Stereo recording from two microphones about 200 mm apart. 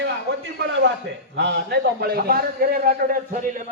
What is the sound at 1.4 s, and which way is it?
A man's voice, 55° right (ahead or behind).